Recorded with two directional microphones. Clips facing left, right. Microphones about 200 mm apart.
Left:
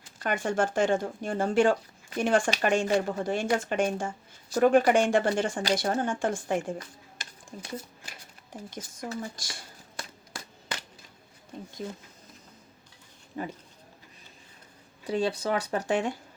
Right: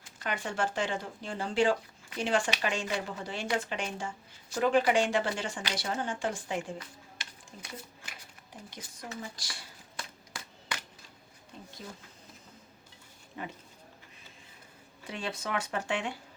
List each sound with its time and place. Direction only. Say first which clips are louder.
0.2 s speech: left 6 dB; 50° left (ahead or behind)
8.7 s a sound: left 7 dB; 45° left (ahead or behind)
13.4 s speech: left 6 dB; 35° left (ahead or behind)
15.0 s speech: left 10 dB; 35° left (ahead or behind)